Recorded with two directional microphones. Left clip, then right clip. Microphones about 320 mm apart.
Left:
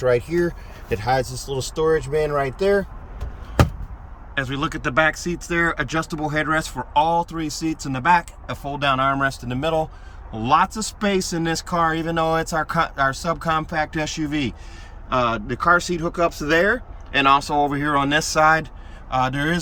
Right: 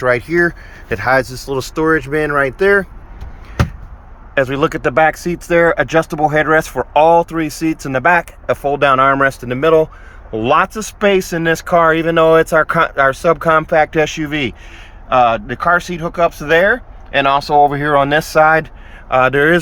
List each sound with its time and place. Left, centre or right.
0.0 s speech: centre
4.4 s speech: centre